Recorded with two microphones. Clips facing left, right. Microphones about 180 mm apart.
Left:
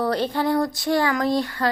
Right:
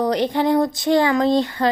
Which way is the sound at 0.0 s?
15° right (ahead or behind).